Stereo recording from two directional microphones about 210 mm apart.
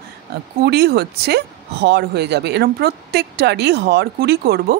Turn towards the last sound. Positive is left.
turn(degrees=-50)  # may be behind; listen again after turning